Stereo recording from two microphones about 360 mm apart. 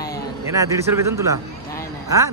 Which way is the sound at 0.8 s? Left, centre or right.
Centre.